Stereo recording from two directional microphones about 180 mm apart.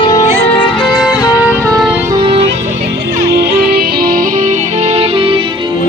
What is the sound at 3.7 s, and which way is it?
Music, 60° right (ahead or behind).